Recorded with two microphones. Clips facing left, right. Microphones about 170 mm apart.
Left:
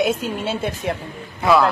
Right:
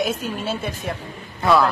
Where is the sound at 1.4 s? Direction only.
Centre (ahead or behind).